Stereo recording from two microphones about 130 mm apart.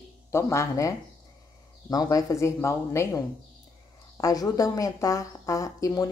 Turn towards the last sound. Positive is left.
turn(degrees=25)  # may be behind; listen again after turning